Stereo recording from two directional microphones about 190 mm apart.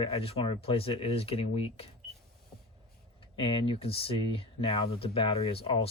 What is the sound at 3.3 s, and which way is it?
Speech, 25° left (ahead or behind).